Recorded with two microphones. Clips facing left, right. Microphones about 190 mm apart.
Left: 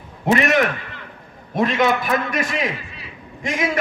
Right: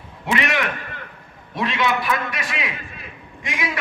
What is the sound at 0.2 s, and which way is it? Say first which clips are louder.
A man's voice: left 6 dB; 45° left (ahead or behind).